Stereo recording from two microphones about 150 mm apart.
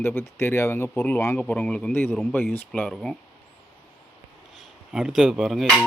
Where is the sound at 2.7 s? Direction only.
5° left (ahead or behind).